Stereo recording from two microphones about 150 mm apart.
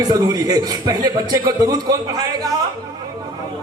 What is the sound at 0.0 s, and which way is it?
A man's voice, 25° right (ahead or behind).